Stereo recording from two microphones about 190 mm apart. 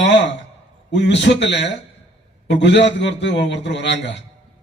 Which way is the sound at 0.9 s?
65° left (ahead or behind).